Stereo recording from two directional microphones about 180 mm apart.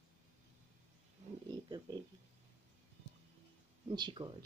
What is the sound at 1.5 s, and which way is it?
Speech, 20° right (ahead or behind).